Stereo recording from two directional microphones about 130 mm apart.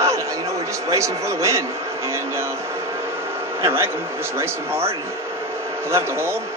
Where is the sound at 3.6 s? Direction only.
20° right (ahead or behind).